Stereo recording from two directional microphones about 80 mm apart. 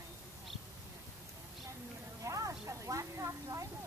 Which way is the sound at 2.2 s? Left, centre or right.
Right.